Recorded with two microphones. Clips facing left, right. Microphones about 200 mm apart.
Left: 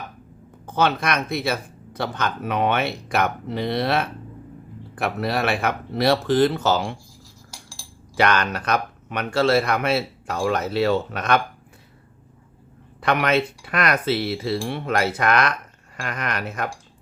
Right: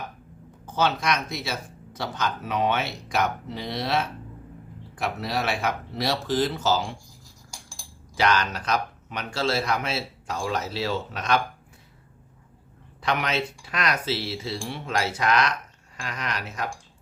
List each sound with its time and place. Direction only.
0.6 s speech: 55° left (ahead or behind)
8.1 s speech: 60° left (ahead or behind)
13.0 s speech: 60° left (ahead or behind)